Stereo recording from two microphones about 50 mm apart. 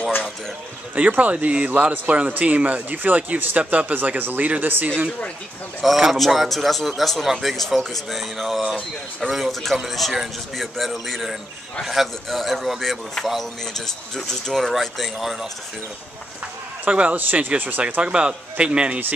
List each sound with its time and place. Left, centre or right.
0.9 s a man's voice: right
5.8 s a man's voice: centre
13.7 s a man's voice: centre
16.8 s a man's voice: right
18.0 s a man's voice: right